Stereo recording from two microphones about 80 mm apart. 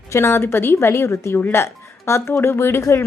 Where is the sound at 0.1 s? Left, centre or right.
Left.